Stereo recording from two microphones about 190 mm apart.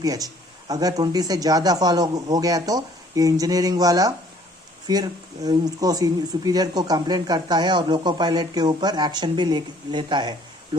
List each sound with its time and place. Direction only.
0.0 s speech: 20° right (ahead or behind)